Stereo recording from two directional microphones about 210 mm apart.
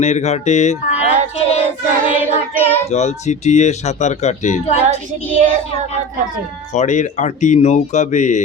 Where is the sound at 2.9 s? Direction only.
30° left (ahead or behind).